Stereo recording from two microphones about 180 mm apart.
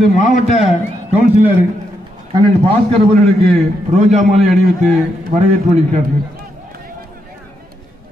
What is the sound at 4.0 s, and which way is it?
A man's voice, 40° right (ahead or behind).